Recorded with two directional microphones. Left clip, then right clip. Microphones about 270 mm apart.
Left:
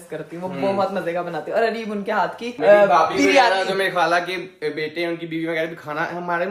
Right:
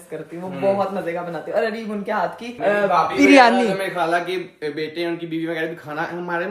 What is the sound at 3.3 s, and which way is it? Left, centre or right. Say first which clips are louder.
Speech: right 6 dB; right.